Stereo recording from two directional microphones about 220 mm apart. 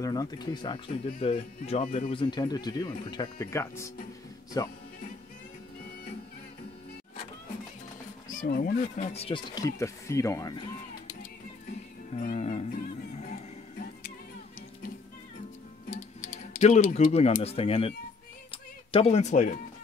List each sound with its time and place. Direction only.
0.0 s speech: 15° left (ahead or behind)
8.3 s speech: 40° left (ahead or behind); by 10.6 s 15° left (ahead or behind)
12.1 s music: 30° left (ahead or behind)
16.5 s speech: 30° left (ahead or behind)
18.5 s music: 25° left (ahead or behind)